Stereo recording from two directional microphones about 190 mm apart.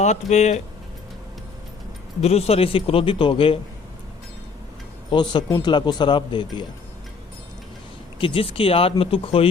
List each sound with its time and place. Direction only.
0.0 s speech: 35° left (ahead or behind)
2.2 s speech: 35° left (ahead or behind)
5.1 s speech: 25° left (ahead or behind)
8.2 s speech: 30° left (ahead or behind)